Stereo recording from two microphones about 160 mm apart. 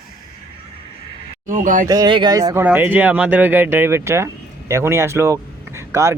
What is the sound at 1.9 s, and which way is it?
Speech, 25° right (ahead or behind).